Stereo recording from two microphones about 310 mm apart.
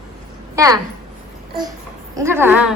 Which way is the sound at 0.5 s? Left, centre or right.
Centre.